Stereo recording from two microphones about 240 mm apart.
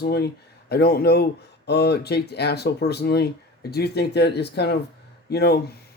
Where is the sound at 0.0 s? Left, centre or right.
Left.